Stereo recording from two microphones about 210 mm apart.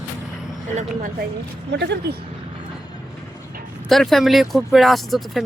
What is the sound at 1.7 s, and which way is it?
Speech, 55° right (ahead or behind).